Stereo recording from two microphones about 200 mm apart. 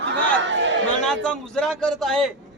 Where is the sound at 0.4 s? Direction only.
65° right (ahead or behind).